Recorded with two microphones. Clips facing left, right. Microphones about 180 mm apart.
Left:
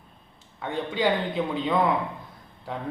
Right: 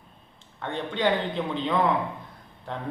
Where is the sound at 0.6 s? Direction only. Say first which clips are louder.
Left 1 dB; 5° left (ahead or behind).